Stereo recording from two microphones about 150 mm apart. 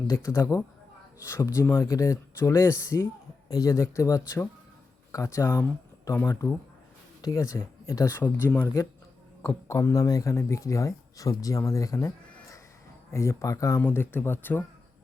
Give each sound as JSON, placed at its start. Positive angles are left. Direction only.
{"t": 0.1, "sound": "speech", "side_deg": 20}